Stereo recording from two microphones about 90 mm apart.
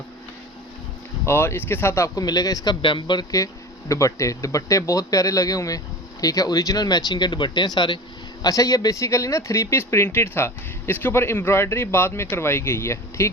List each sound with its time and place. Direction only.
1.2 s speech: 30° left (ahead or behind)
2.1 s a man's voice: 45° left (ahead or behind)
2.8 s speech: 60° left (ahead or behind)
3.3 s speech: 35° left (ahead or behind); by 7.9 s 55° left (ahead or behind)
8.4 s speech: 40° left (ahead or behind)